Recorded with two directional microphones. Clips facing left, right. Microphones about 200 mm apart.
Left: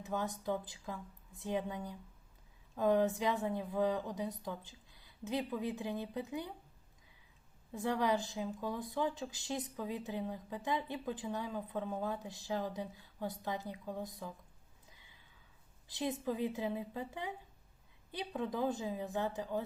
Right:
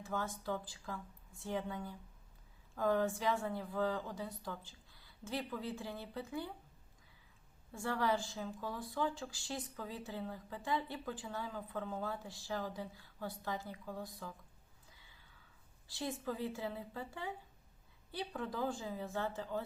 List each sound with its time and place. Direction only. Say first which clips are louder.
0.0 s a woman's voice: left 3 dB; 20° left (ahead or behind)
7.7 s a woman's voice: left 2 dB; 20° left (ahead or behind)
14.8 s sigh: left 1 dB; 20° left (ahead or behind)
15.9 s a woman's voice: left 4 dB; 20° left (ahead or behind)